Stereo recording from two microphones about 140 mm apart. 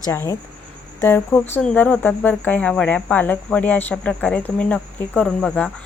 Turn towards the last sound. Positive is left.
turn(degrees=5)  # may be behind; listen again after turning